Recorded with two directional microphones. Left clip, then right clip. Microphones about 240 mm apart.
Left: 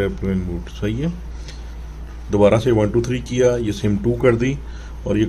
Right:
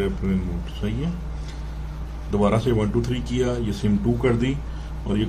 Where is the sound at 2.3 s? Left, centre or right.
Left.